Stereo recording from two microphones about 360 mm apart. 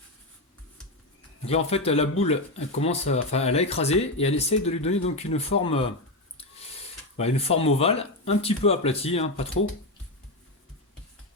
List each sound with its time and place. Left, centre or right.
1.5 s speech: centre
7.2 s speech: centre